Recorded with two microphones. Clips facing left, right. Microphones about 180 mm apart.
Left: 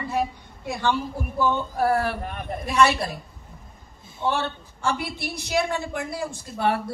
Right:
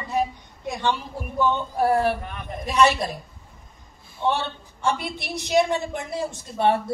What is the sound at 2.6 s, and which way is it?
Speech, 20° right (ahead or behind).